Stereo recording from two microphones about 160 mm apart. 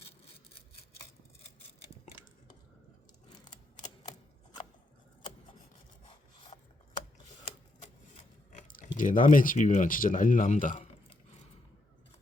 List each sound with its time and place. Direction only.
6.5 s a sound: 40° left (ahead or behind)
8.1 s biting: 55° left (ahead or behind)
9.0 s speech: 55° left (ahead or behind)